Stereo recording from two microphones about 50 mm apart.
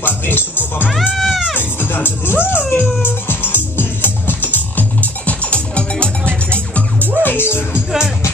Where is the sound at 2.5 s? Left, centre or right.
Left.